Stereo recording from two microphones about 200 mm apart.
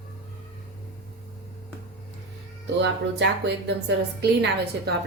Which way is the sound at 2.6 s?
60° right (ahead or behind).